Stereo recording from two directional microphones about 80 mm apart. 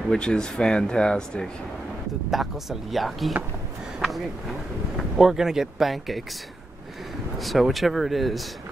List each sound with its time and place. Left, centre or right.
0.1 s speech: centre
2.3 s speech: centre
4.9 s speech: centre
7.3 s speech: centre